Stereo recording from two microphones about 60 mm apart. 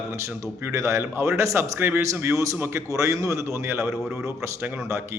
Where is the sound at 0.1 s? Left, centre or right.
Right.